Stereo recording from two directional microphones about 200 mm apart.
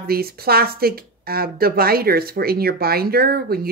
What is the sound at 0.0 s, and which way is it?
A woman's voice, 50° right (ahead or behind).